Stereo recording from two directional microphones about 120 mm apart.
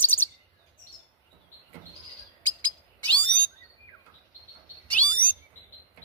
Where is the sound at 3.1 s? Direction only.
10° left (ahead or behind).